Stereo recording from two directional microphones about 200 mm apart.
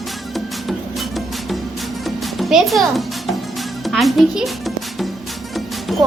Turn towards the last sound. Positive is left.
turn(degrees=0)  # may be behind; listen again after turning